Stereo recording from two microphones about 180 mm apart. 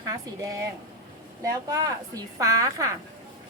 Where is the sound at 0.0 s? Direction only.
20° right (ahead or behind).